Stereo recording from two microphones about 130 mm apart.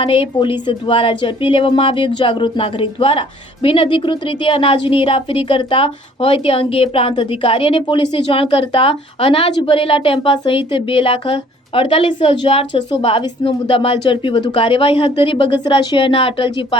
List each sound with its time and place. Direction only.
0.0 s a woman's voice: 40° left (ahead or behind)